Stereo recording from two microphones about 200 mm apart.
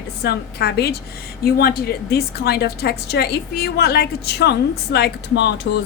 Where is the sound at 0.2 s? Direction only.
50° left (ahead or behind).